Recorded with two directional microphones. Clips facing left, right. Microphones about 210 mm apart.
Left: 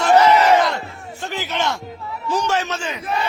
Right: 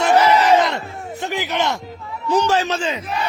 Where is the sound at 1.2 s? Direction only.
15° right (ahead or behind).